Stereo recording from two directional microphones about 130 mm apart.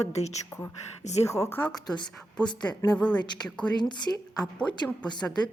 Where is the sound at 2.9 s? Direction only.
10° left (ahead or behind).